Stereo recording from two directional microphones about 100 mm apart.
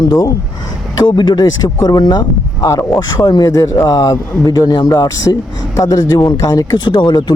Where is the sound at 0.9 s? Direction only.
45° left (ahead or behind).